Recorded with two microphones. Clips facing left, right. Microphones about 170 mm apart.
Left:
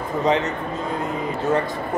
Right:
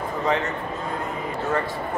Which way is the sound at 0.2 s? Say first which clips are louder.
Left 4 dB; 20° left (ahead or behind).